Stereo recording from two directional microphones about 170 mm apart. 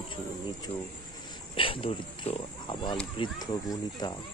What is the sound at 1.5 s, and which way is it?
Pig, 30° left (ahead or behind).